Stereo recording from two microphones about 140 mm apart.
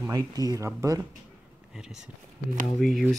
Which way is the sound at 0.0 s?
25° right (ahead or behind).